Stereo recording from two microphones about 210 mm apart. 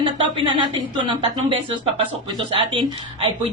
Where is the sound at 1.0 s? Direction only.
25° right (ahead or behind).